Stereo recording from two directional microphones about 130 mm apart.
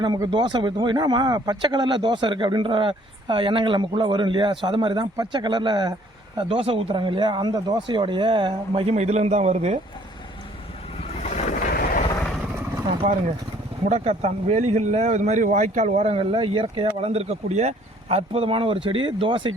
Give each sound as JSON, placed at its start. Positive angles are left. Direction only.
{"t": 0.0, "sound": "speech", "side_deg": -35}
{"t": 11.2, "sound": "boat", "side_deg": 65}
{"t": 13.0, "sound": "speech", "side_deg": -80}
{"t": 13.8, "sound": "speech", "side_deg": -60}
{"t": 16.3, "sound": "speech", "side_deg": -45}